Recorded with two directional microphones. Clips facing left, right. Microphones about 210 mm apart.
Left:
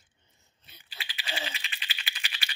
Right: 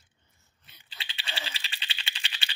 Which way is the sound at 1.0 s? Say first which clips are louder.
Left 3 dB; 25° right (ahead or behind).